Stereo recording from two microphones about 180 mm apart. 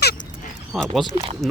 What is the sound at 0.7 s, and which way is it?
Speech, centre (ahead or behind).